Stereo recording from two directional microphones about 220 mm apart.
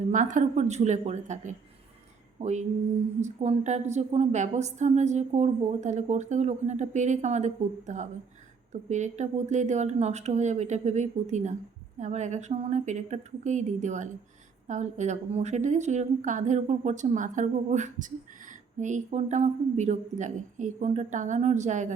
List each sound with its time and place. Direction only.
0.1 s a woman's voice: 35° right (ahead or behind)